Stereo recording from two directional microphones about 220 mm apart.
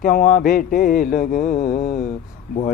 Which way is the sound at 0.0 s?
40° left (ahead or behind).